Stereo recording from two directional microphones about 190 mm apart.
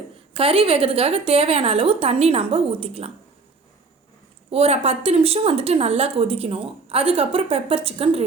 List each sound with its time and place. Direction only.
0.3 s a woman's voice: 30° right (ahead or behind)
4.5 s a woman's voice: 30° right (ahead or behind)